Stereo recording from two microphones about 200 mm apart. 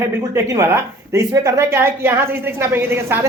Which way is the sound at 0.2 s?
15° right (ahead or behind).